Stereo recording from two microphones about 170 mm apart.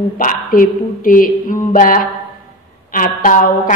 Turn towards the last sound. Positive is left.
turn(degrees=50)  # may be behind; listen again after turning